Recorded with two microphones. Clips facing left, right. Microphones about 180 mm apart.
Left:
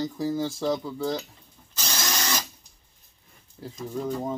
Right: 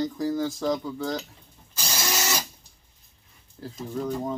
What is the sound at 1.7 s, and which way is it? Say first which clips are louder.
Tools: right 1 dB; 10° right (ahead or behind).